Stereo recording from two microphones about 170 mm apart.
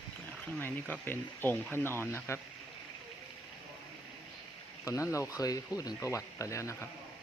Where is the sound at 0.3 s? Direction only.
10° left (ahead or behind).